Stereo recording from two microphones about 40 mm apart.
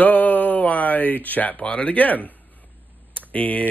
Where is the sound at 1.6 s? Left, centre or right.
Left.